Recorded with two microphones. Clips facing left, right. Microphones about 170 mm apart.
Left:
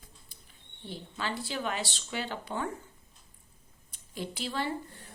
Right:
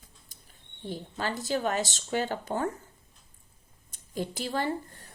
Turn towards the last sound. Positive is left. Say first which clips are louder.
# right 3 dB
turn(degrees=-45)  # may be behind; listen again after turning